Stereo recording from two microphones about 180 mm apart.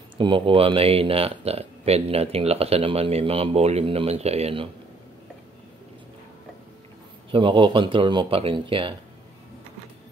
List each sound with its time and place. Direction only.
0.2 s speech: 30° right (ahead or behind)
7.2 s speech: 30° right (ahead or behind)